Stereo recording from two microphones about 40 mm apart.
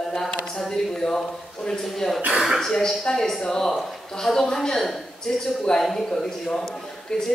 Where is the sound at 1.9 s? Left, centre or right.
Centre.